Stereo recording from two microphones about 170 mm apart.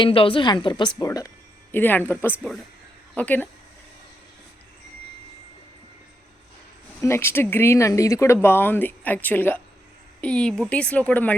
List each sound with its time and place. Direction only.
0.0 s a woman's voice: 30° left (ahead or behind); by 3.5 s 10° left (ahead or behind)
7.0 s speech: 15° left (ahead or behind)